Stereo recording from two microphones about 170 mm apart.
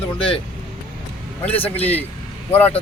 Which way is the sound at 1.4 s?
10° left (ahead or behind).